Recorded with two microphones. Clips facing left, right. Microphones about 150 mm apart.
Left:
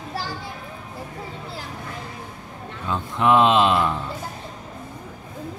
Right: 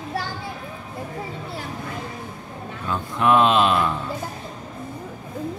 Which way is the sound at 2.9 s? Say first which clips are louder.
Even; 20° left (ahead or behind).